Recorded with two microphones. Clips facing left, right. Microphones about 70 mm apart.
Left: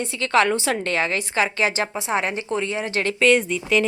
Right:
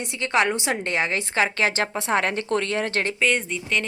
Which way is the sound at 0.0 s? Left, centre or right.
Right.